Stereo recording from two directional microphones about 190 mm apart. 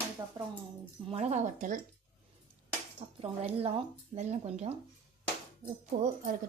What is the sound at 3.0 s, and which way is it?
Speech, 25° right (ahead or behind).